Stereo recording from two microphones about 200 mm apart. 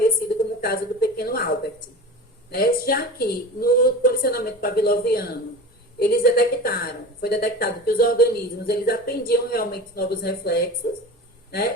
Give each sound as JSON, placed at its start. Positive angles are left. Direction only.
{"t": 0.6, "sound": "a woman's voice", "side_deg": 50}